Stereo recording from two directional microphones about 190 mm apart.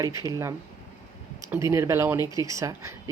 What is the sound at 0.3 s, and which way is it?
A woman's voice, 15° right (ahead or behind).